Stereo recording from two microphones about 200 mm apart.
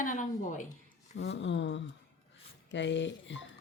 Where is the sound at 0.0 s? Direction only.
40° left (ahead or behind).